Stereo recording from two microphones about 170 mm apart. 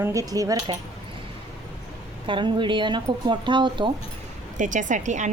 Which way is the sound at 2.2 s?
30° right (ahead or behind).